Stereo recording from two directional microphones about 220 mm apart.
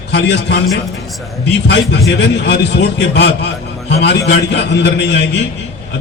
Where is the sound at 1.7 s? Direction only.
50° left (ahead or behind).